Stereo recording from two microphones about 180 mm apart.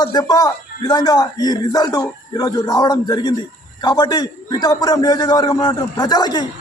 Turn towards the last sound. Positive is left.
turn(degrees=25)  # may be behind; listen again after turning